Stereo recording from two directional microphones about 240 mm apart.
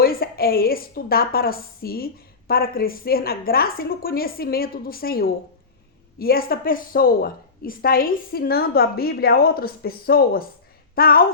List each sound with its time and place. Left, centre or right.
0.0 s a woman's voice: left